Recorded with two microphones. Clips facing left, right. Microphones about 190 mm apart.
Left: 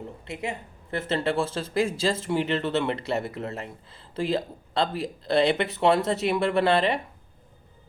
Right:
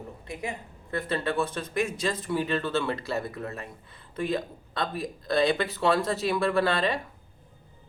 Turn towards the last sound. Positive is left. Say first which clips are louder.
# left 3 dB
turn(degrees=25)  # may be behind; listen again after turning